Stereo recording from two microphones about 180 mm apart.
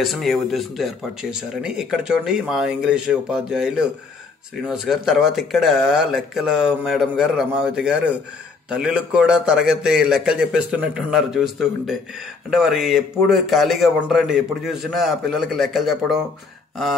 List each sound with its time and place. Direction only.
0.0 s speech: centre (ahead or behind)